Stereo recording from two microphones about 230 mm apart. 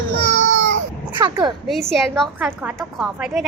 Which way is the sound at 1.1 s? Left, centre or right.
Centre.